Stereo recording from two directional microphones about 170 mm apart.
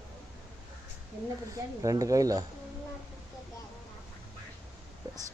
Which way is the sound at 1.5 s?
20° right (ahead or behind).